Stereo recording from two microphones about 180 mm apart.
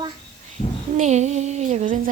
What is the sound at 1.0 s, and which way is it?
Music, 40° right (ahead or behind).